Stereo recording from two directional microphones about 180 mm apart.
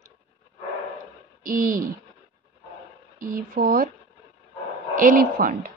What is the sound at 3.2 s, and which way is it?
Speech, 50° right (ahead or behind).